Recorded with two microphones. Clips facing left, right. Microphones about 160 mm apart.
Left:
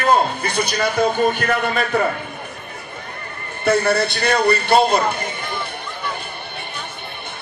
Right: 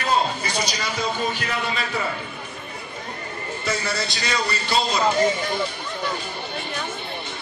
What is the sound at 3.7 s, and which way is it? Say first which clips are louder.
Speech: left 11 dB; 60° left (ahead or behind).